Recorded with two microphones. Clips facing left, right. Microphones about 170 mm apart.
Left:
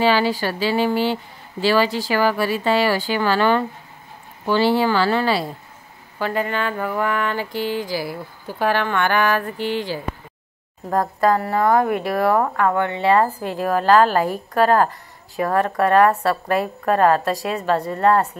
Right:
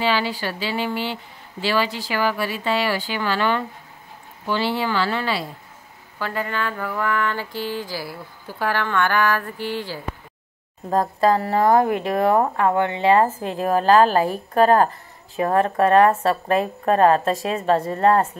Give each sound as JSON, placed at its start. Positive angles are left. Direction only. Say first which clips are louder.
{"t": 0.0, "sound": "speech", "louder": "left 4 dB", "side_deg": 40}
{"t": 6.1, "sound": "speech", "louder": "left 4 dB", "side_deg": 20}
{"t": 10.9, "sound": "speech", "louder": "even", "side_deg": -25}